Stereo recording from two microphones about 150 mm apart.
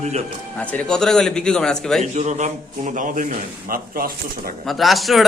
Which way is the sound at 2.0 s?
45° right (ahead or behind).